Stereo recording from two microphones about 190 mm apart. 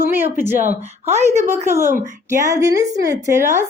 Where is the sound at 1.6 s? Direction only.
15° right (ahead or behind).